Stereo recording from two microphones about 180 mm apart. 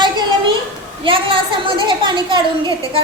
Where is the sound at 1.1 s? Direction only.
30° right (ahead or behind).